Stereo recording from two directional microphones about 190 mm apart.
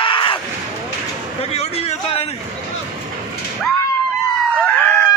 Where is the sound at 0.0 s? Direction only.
25° left (ahead or behind).